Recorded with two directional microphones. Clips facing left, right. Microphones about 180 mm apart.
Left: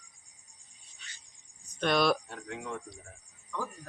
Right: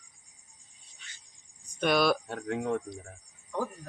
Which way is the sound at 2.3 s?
50° right (ahead or behind).